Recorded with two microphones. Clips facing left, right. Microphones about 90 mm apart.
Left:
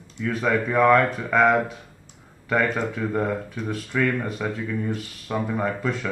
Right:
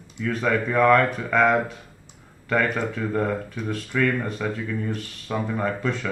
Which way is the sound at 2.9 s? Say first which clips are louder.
Even; 5° left (ahead or behind).